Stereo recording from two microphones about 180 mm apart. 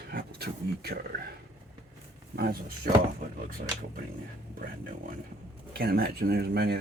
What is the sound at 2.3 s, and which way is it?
Speech, 60° right (ahead or behind).